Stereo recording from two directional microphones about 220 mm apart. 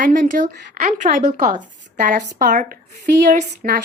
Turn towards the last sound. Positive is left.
turn(degrees=-35)  # may be behind; listen again after turning